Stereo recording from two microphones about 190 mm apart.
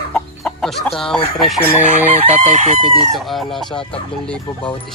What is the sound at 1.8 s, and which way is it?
Chicken, 40° left (ahead or behind).